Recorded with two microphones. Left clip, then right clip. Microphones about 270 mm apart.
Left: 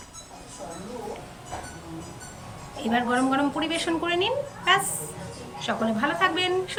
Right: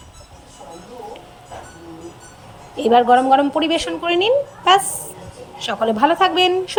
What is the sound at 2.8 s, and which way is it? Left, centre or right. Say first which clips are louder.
Speech: right 12 dB; centre.